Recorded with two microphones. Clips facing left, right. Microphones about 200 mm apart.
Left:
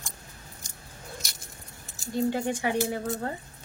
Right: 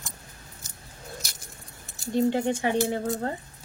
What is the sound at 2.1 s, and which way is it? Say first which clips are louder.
Speech: right 3 dB; 25° right (ahead or behind).